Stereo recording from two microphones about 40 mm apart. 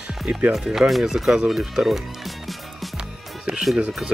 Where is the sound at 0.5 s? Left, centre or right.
Centre.